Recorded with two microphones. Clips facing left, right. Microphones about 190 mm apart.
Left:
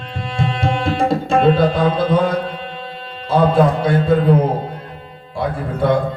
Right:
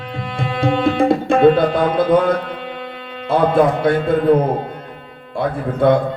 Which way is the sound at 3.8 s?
55° right (ahead or behind).